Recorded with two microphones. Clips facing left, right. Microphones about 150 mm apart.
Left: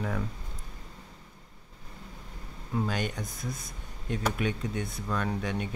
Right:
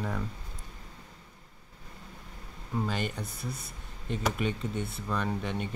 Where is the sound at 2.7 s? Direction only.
Centre (ahead or behind).